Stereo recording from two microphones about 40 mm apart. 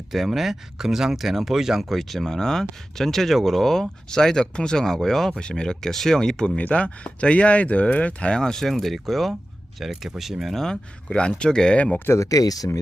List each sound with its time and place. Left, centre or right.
0.1 s speech: centre
2.2 s speech: centre
5.4 s speech: left
6.6 s speech: left
8.4 s speech: centre
8.6 s speech: centre
10.5 s speech: centre
11.1 s speech: left
12.1 s speech: left